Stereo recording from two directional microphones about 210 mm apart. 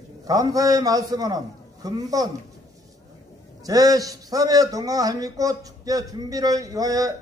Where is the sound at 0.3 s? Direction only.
15° right (ahead or behind).